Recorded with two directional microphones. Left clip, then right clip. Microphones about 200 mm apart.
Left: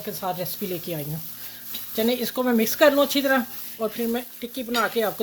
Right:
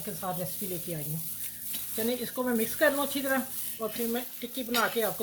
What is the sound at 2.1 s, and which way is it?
Speech, 60° left (ahead or behind).